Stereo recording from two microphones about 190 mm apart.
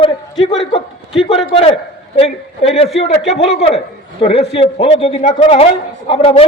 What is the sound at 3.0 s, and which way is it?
A man's voice, 35° left (ahead or behind).